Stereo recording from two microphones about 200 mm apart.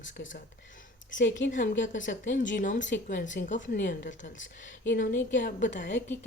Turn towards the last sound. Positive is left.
turn(degrees=40)  # may be behind; listen again after turning